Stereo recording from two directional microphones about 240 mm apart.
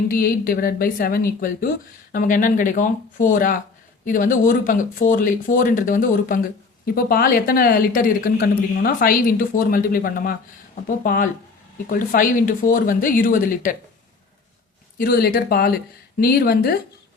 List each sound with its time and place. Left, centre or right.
0.1 s speech: left
14.9 s speech: left